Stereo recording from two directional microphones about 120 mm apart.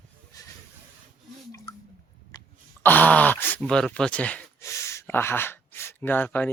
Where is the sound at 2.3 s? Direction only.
35° left (ahead or behind).